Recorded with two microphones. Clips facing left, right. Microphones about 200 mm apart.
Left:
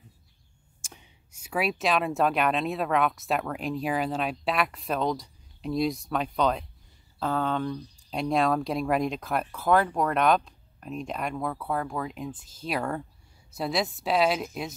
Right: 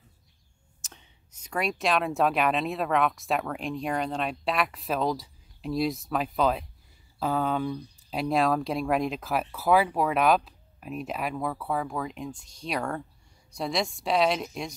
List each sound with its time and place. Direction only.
0.8 s speech: 10° left (ahead or behind)